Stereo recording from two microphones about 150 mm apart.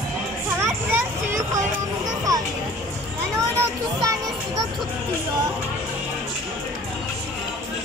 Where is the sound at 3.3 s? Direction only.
20° right (ahead or behind).